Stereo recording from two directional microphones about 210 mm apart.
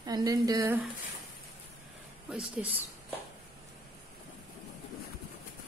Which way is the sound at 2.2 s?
5° right (ahead or behind).